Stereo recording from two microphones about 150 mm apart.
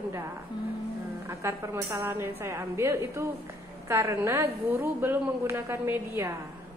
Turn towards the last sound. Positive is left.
turn(degrees=-20)  # may be behind; listen again after turning